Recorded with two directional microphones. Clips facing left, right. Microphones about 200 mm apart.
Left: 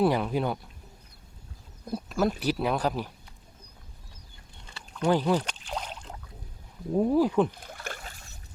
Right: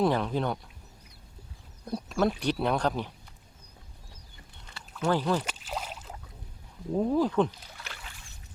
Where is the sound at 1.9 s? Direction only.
Centre (ahead or behind).